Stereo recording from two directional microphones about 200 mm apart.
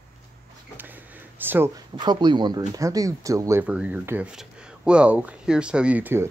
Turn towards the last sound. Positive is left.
turn(degrees=-10)  # may be behind; listen again after turning